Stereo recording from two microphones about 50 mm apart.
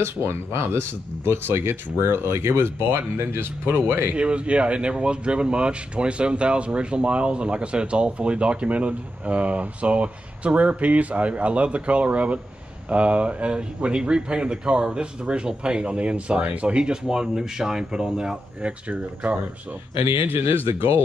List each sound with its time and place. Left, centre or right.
0.0 s speech: right
4.1 s speech: right
18.6 s speech: right
20.3 s speech: right